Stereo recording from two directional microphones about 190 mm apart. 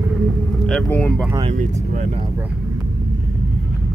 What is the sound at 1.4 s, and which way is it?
Vehicle, 35° right (ahead or behind).